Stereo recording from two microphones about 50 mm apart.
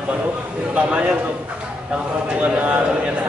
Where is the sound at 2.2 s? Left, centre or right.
Right.